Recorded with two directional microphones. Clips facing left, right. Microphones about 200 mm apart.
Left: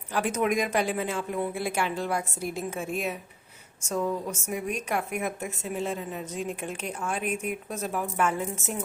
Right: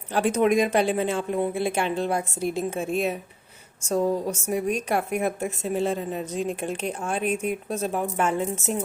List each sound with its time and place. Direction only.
0.1 s a woman's voice: 30° right (ahead or behind)